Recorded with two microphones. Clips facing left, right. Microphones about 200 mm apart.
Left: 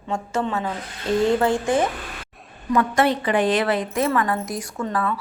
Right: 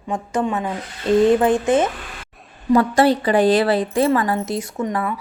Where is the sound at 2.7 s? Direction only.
30° right (ahead or behind).